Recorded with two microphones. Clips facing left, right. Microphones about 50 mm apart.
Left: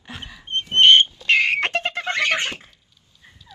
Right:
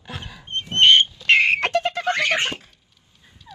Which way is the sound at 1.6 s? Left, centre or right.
Left.